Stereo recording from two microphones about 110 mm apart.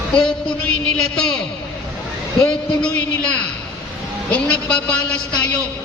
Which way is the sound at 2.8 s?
10° left (ahead or behind).